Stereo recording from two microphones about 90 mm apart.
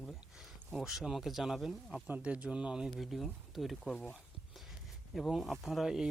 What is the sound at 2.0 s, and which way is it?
Speech, 15° right (ahead or behind).